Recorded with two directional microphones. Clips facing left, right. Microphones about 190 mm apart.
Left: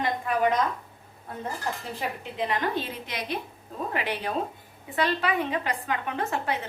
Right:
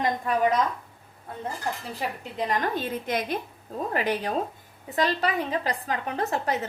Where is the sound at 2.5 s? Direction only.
45° right (ahead or behind).